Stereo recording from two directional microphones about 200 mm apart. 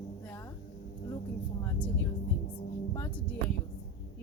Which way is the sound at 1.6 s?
10° left (ahead or behind).